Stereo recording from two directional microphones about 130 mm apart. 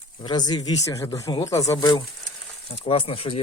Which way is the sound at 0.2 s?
35° left (ahead or behind).